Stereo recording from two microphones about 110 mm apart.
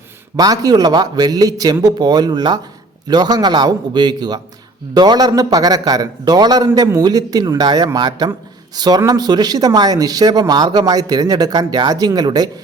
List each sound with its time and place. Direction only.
0.3 s speech: 35° right (ahead or behind)
6.7 s a man's voice: 25° right (ahead or behind)